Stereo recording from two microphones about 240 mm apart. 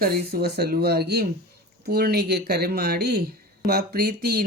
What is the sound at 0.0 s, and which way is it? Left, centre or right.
Speech, right.